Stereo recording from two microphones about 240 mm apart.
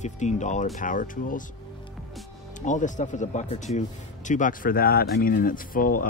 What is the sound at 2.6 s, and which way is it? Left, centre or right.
Speech, left.